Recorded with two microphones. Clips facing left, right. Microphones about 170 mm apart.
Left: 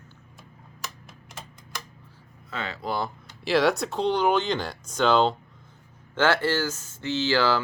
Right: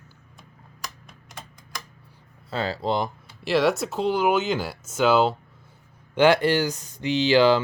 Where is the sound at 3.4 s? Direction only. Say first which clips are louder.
Right 1 dB; centre (ahead or behind).